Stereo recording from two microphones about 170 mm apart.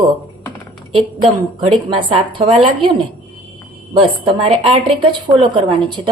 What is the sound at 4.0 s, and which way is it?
A woman's voice, 30° right (ahead or behind).